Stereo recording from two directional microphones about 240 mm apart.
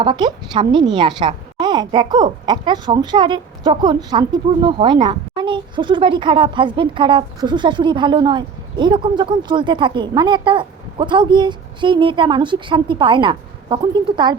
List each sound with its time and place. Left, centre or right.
0.0 s a woman's voice: centre